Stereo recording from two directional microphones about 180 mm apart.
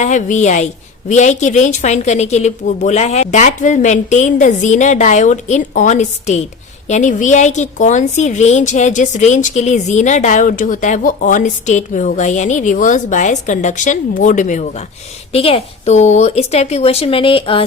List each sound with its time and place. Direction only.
0.0 s a woman's voice: 45° left (ahead or behind)
15.3 s a woman's voice: 35° left (ahead or behind)